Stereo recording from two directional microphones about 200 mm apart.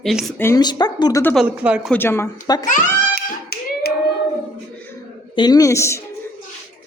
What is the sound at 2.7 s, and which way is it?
Speech, 40° left (ahead or behind).